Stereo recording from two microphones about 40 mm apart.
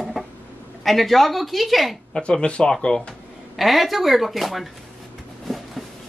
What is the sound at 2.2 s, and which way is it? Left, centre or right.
Speech, left.